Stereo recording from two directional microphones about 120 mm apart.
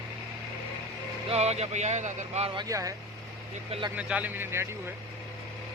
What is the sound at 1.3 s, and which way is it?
Speech, 65° right (ahead or behind).